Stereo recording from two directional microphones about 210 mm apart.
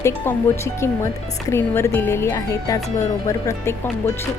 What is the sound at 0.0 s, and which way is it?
Speech, 15° left (ahead or behind).